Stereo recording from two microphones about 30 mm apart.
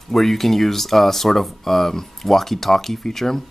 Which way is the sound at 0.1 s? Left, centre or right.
Centre.